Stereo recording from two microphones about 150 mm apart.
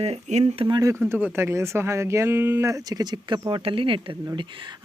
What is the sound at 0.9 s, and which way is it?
Speech, 15° right (ahead or behind).